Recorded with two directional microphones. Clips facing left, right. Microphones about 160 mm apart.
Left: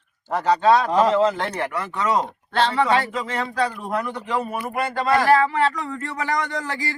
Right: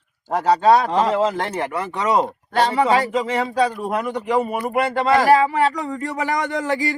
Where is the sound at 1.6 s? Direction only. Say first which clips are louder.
Right 1 dB; 25° right (ahead or behind).